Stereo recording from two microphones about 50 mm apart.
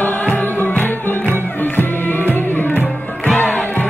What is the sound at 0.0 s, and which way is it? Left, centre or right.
Music, left.